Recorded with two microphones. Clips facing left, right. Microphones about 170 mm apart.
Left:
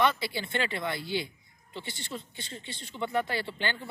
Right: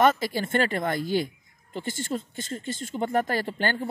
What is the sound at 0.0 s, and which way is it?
A woman's voice, 45° right (ahead or behind).